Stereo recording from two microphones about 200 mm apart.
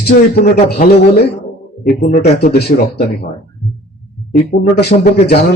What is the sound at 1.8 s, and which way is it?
A man's voice, 50° left (ahead or behind).